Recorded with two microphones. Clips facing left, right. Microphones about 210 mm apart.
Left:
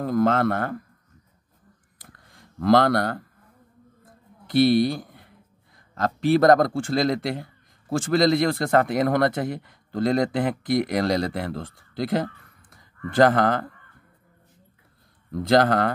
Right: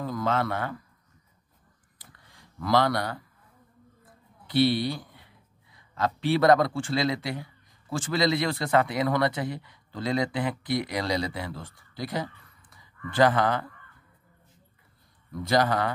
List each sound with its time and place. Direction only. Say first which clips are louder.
0.0 s a man's voice: left 7 dB; 55° left (ahead or behind)
2.0 s a sound: left 4 dB; 50° left (ahead or behind)
4.5 s a man's voice: left 5 dB; 45° left (ahead or behind)
12.6 s speech: left 5 dB; 45° left (ahead or behind)
15.3 s a man's voice: left 5 dB; 50° left (ahead or behind)